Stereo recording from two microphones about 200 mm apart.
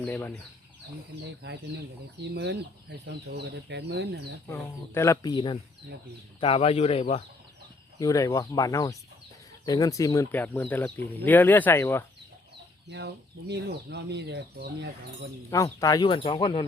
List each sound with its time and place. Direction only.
0.0 s speech: 10° left (ahead or behind)
1.2 s speech: 55° right (ahead or behind)
4.4 s speech: 15° left (ahead or behind); by 7.2 s 30° left (ahead or behind)
7.9 s speech: 15° left (ahead or behind)
12.9 s speech: 55° right (ahead or behind)
15.4 s speech: 15° left (ahead or behind)